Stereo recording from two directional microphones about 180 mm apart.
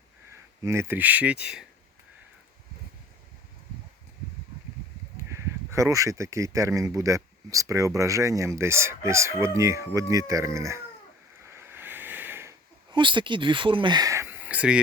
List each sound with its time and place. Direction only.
0.6 s speech: 15° right (ahead or behind)
5.1 s speech: 15° right (ahead or behind)
11.4 s a sound: 15° right (ahead or behind)
12.9 s speech: 25° right (ahead or behind); by 14.8 s 5° right (ahead or behind)